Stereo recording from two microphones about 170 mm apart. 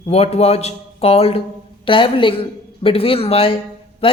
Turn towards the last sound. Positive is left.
turn(degrees=35)  # may be behind; listen again after turning